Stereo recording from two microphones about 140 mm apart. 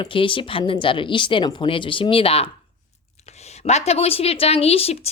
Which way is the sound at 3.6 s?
50° left (ahead or behind).